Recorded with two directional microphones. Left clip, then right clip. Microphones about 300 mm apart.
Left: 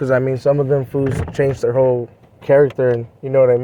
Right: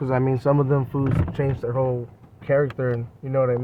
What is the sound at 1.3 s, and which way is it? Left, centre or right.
Speech, left.